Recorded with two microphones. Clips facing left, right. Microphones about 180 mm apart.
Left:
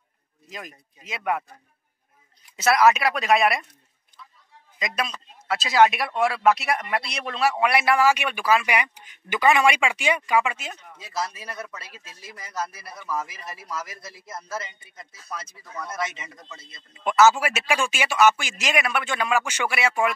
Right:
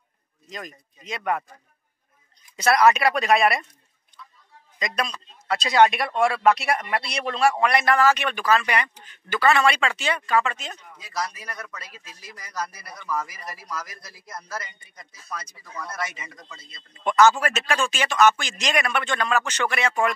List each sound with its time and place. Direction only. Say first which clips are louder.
0.5 s speech: right 2 dB; 5° left (ahead or behind)
2.5 s speech: even; centre (ahead or behind)
4.7 s speech: right 1 dB; 5° left (ahead or behind)
11.0 s speech: even; 25° left (ahead or behind)
16.9 s speech: even; 5° left (ahead or behind)